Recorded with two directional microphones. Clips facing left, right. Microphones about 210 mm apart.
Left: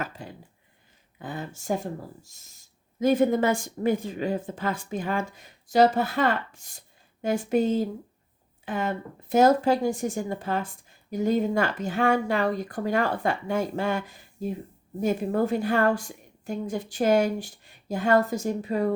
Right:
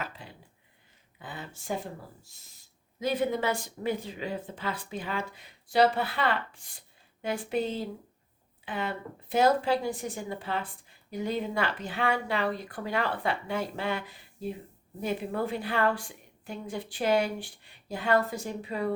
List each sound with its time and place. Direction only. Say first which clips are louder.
0.0 s speech: left 5 dB; 45° left (ahead or behind)